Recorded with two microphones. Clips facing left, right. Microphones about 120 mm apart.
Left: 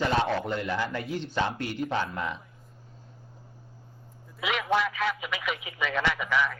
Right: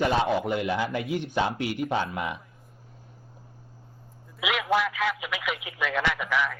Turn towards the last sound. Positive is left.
turn(degrees=0)  # may be behind; listen again after turning